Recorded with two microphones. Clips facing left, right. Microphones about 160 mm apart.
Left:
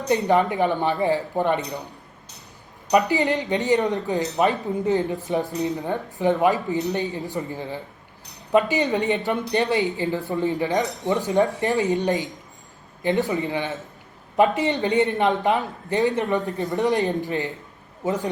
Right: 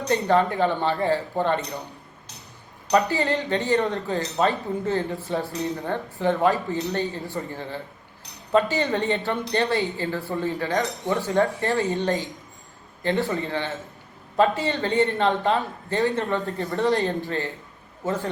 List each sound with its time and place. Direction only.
0.1 s a man's voice: 20° left (ahead or behind)
2.9 s a man's voice: 15° left (ahead or behind)